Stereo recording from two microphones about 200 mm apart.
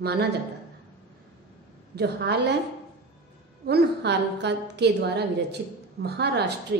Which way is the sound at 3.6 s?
55° right (ahead or behind).